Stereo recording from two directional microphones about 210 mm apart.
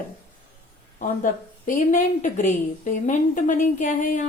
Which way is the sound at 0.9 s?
40° left (ahead or behind).